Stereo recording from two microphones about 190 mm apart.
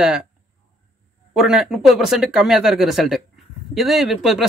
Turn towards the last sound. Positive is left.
turn(degrees=0)  # may be behind; listen again after turning